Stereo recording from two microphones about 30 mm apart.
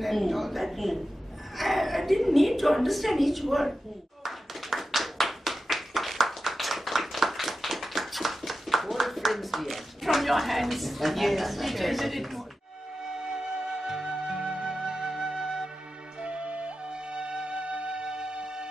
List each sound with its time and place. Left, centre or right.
0.0 s a woman's voice: centre
4.2 s clapping: centre
13.2 s flute: right
13.7 s music: centre
14.7 s flute: right
16.2 s music: right